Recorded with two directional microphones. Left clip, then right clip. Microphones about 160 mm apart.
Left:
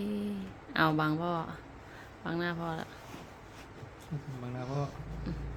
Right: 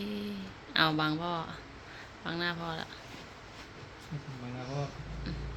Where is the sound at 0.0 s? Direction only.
40° left (ahead or behind).